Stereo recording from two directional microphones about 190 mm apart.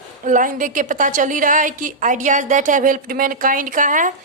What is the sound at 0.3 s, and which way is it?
A woman's voice, 45° right (ahead or behind).